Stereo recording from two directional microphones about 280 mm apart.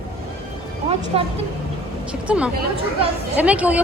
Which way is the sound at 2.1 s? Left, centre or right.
Centre.